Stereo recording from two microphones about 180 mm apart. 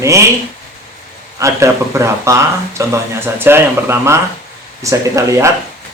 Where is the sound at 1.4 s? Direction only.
15° right (ahead or behind).